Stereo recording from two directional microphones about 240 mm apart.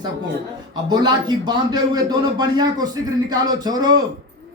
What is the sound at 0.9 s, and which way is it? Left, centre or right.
Speech, centre.